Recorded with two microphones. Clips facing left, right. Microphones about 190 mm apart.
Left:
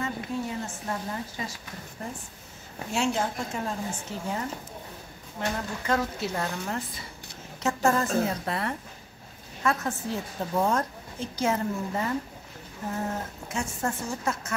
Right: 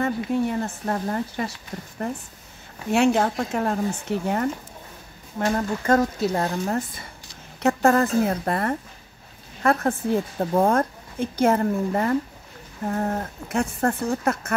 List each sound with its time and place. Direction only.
0.0 s a woman's voice: 60° right (ahead or behind)
5.9 s speech: 40° right (ahead or behind)
7.6 s a woman's voice: 60° right (ahead or behind)